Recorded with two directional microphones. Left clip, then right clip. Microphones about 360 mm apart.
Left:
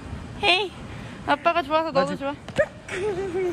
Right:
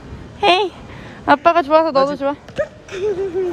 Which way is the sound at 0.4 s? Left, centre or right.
Right.